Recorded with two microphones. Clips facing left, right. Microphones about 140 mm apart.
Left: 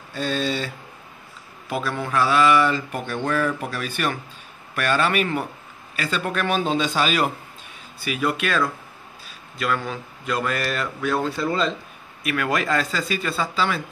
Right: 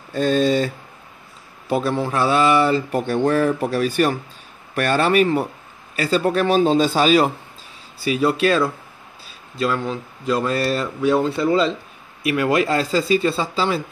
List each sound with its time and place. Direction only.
0.1 s speech: 45° right (ahead or behind)
1.7 s a man's voice: 35° right (ahead or behind)